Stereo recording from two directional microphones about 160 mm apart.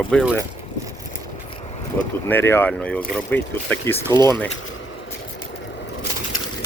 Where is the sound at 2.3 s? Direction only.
15° left (ahead or behind).